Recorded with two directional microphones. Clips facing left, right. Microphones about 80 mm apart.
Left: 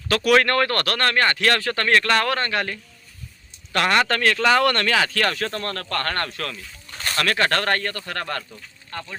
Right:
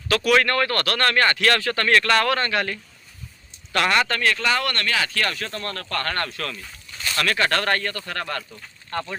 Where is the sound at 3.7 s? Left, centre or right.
Left.